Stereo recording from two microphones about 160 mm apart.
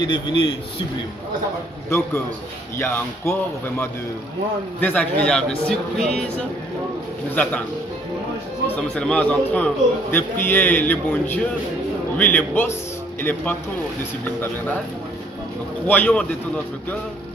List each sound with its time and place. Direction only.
0.0 s a man's voice: 30° left (ahead or behind)
1.9 s a man's voice: 15° left (ahead or behind)
4.7 s speech: 10° left (ahead or behind)
8.7 s a man's voice: 5° left (ahead or behind)
15.9 s a man's voice: 10° left (ahead or behind)